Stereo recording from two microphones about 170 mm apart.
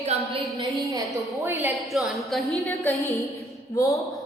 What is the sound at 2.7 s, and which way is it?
A woman's voice, 15° left (ahead or behind).